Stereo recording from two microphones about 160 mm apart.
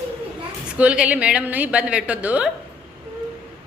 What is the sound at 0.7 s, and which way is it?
A woman's voice, 5° right (ahead or behind).